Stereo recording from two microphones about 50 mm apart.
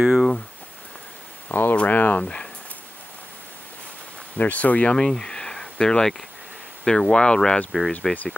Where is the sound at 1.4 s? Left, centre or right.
Left.